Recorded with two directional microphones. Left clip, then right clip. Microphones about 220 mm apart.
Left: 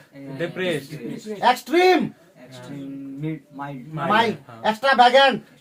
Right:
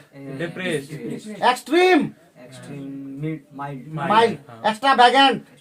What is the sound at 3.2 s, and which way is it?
Speech, 20° right (ahead or behind).